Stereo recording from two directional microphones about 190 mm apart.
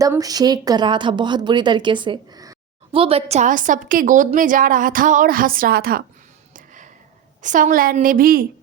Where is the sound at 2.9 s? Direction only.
30° right (ahead or behind); by 6.0 s 50° right (ahead or behind).